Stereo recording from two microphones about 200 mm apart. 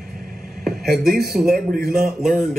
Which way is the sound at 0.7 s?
Centre (ahead or behind).